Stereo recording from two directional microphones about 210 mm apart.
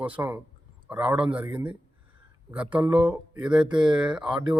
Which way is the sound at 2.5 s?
5° right (ahead or behind).